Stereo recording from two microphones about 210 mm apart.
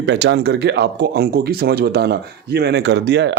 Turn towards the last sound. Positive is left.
turn(degrees=-55)  # may be behind; listen again after turning